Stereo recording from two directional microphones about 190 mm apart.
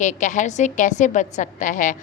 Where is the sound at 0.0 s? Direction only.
40° left (ahead or behind).